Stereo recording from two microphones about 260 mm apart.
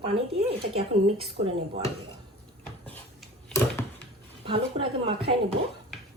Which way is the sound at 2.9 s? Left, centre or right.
Centre.